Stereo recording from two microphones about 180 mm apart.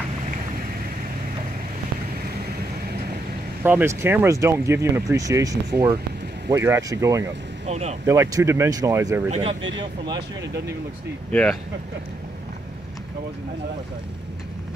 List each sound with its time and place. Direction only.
3.6 s speech: 10° right (ahead or behind)
7.6 s speech: 35° right (ahead or behind)
8.1 s speech: 15° right (ahead or behind)
9.3 s speech: 30° right (ahead or behind)